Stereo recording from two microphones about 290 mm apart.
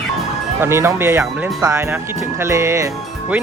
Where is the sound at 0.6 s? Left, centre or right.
Centre.